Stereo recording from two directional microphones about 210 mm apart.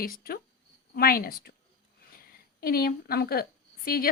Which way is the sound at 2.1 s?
45° left (ahead or behind).